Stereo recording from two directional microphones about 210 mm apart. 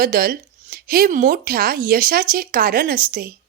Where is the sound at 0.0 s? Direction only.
45° right (ahead or behind).